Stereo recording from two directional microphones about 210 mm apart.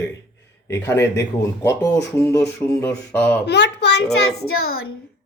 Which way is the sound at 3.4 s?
55° left (ahead or behind).